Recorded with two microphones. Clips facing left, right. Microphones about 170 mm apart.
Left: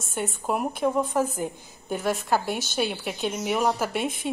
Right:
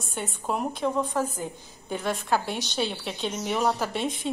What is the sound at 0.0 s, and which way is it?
A woman's voice, centre (ahead or behind).